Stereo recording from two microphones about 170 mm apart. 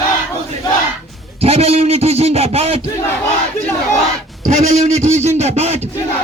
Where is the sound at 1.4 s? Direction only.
35° right (ahead or behind).